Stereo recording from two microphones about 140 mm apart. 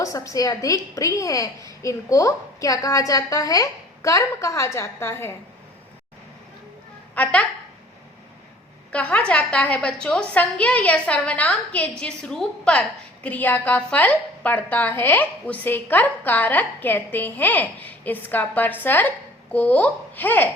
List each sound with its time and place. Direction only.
0.0 s a woman's voice: 25° left (ahead or behind)
7.2 s a woman's voice: 10° left (ahead or behind)
8.9 s a woman's voice: 10° left (ahead or behind)